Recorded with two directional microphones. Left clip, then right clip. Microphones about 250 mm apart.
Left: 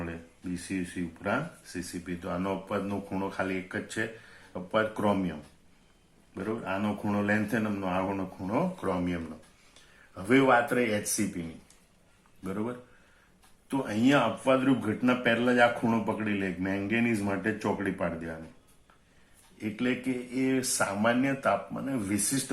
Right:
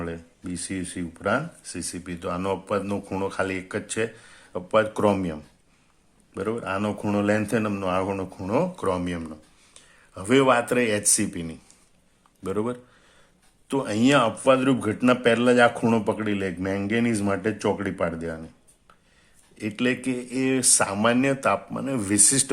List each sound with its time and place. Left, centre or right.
0.7 s speech: right
6.3 s speech: right
12.4 s speech: right
19.5 s speech: right